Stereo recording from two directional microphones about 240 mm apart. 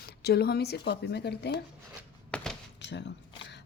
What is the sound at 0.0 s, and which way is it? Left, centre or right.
Speech, left.